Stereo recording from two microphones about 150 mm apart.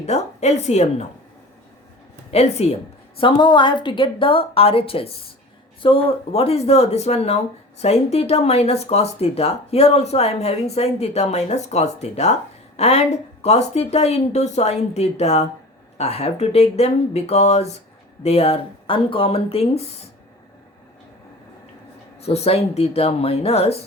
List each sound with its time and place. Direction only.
0.0 s speech: 45° left (ahead or behind)
2.3 s speech: 45° left (ahead or behind)
3.2 s a woman's voice: 35° left (ahead or behind)
22.2 s speech: 45° left (ahead or behind)